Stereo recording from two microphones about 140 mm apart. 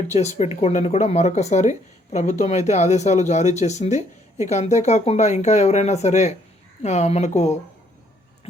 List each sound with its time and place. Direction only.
0.1 s a woman's voice: 55° left (ahead or behind)